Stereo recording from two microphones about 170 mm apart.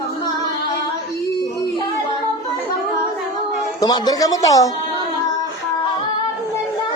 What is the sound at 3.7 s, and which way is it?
Speech, 25° left (ahead or behind).